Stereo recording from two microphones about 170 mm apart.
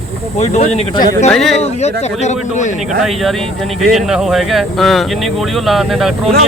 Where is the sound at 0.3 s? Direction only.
40° left (ahead or behind).